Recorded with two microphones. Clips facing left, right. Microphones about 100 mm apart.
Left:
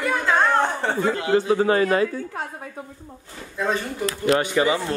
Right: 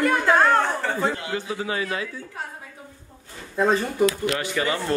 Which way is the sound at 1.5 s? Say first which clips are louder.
Left 8 dB; 45° left (ahead or behind).